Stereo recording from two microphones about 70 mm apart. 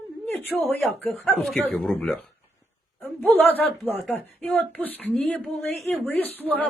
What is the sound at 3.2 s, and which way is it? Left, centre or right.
Speech, left.